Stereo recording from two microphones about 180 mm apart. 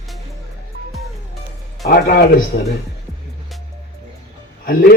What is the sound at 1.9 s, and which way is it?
Speech, 50° left (ahead or behind).